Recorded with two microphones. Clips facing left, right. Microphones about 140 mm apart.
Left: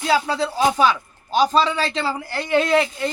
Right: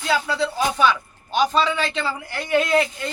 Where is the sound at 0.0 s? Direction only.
35° left (ahead or behind).